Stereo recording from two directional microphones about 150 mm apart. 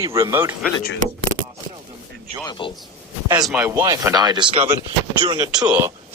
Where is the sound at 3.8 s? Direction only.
25° right (ahead or behind).